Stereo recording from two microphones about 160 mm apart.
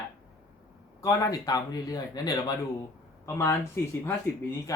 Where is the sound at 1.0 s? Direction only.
20° left (ahead or behind).